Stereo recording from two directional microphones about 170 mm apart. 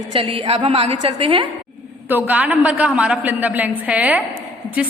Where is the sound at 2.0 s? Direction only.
10° right (ahead or behind).